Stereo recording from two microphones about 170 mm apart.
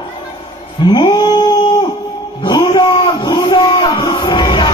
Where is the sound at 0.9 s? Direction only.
25° left (ahead or behind).